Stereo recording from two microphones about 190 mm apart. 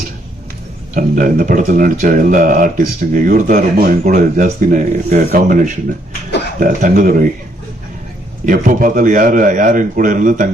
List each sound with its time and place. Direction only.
0.9 s speech: 45° right (ahead or behind)
8.4 s speech: 45° right (ahead or behind)